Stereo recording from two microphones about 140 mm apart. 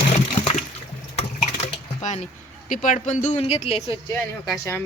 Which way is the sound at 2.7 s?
65° left (ahead or behind).